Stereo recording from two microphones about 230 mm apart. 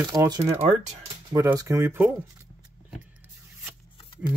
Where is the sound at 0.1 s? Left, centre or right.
Centre.